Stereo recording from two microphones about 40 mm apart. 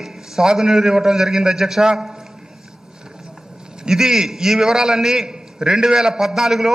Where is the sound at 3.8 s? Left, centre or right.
Centre.